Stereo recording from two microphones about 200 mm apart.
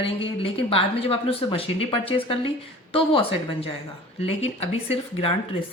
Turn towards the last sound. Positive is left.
turn(degrees=30)  # may be behind; listen again after turning